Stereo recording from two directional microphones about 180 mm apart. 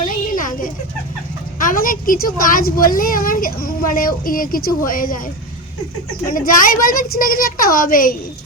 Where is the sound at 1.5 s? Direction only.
50° left (ahead or behind).